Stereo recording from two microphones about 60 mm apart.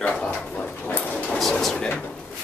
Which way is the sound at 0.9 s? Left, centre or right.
Left.